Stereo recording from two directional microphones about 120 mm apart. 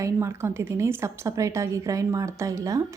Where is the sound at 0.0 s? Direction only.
25° right (ahead or behind).